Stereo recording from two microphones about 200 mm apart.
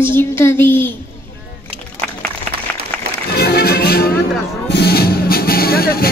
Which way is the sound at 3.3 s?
50° left (ahead or behind).